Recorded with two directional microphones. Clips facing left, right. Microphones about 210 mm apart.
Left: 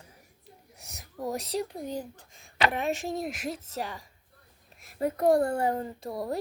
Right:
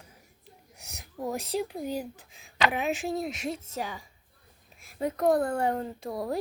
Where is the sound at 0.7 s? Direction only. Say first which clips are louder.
Right 1 dB; centre (ahead or behind).